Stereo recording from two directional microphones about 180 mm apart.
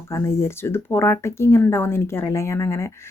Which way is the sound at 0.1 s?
15° left (ahead or behind).